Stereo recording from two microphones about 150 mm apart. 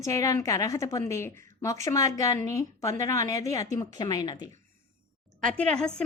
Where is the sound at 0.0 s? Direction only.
20° left (ahead or behind).